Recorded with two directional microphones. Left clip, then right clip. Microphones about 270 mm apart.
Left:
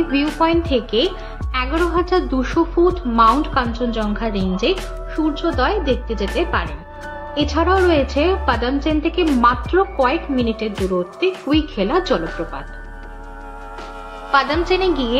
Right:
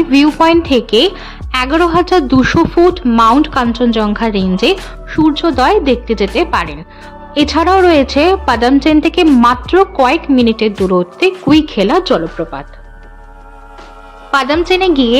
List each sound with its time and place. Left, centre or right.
0.1 s a woman's voice: right
14.3 s a woman's voice: right